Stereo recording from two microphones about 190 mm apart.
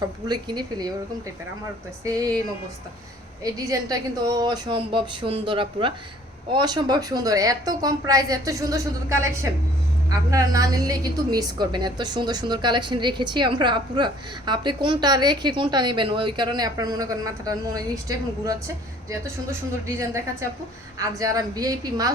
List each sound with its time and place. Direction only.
0.0 s a woman's voice: 20° right (ahead or behind)
2.0 s speech: 20° right (ahead or behind)
3.4 s a woman's voice: 20° right (ahead or behind)
21.0 s a woman's voice: 15° right (ahead or behind)